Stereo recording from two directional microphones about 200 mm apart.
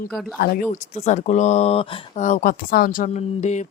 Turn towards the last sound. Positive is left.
turn(degrees=35)  # may be behind; listen again after turning